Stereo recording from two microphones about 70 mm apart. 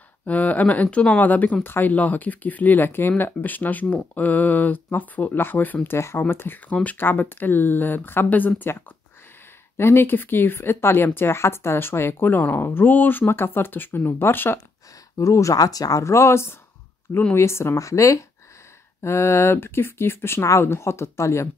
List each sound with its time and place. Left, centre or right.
0.2 s speech: left
9.8 s speech: left
15.1 s speech: left